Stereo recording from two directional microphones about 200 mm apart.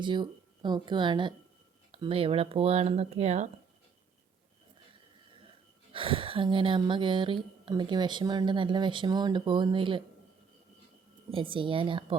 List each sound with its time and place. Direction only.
0.0 s speech: 25° right (ahead or behind)
5.9 s speech: 25° right (ahead or behind)
11.3 s speech: 25° right (ahead or behind)